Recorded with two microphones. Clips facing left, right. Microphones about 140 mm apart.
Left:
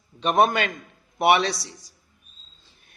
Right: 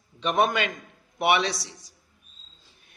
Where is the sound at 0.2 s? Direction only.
35° left (ahead or behind).